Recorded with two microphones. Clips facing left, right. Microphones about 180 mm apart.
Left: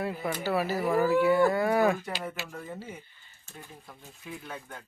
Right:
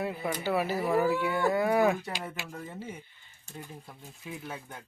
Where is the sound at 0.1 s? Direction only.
15° right (ahead or behind).